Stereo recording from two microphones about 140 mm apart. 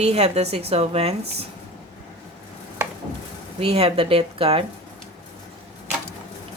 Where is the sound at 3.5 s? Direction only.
45° right (ahead or behind).